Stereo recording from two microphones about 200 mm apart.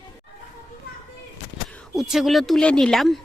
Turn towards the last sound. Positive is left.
turn(degrees=0)  # may be behind; listen again after turning